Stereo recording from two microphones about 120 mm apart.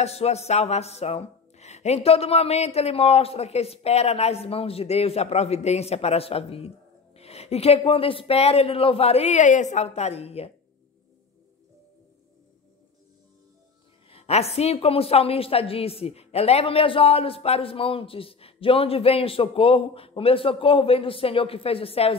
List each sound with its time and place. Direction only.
0.0 s speech: 60° left (ahead or behind)
14.1 s a woman's voice: 60° left (ahead or behind)